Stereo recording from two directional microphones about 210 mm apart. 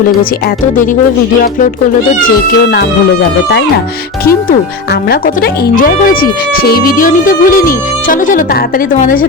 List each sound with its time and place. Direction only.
2.7 s speech: 55° left (ahead or behind)
5.0 s speech: 45° left (ahead or behind)